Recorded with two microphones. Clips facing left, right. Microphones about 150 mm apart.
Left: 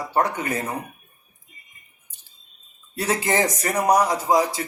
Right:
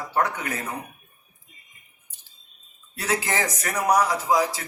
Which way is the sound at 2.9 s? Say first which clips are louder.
Left 4 dB; 30° left (ahead or behind).